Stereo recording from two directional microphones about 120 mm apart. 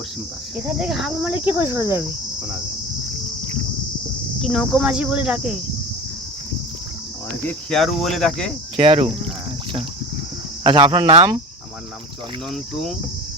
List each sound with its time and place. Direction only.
0.7 s speech: 5° right (ahead or behind)
1.2 s cricket: 15° right (ahead or behind)
4.4 s speech: centre (ahead or behind)
7.7 s speech: centre (ahead or behind)
8.7 s cricket: 50° right (ahead or behind)
10.6 s speech: 45° right (ahead or behind)